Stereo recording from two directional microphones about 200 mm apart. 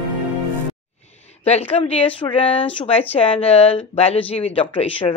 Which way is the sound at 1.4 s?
30° left (ahead or behind).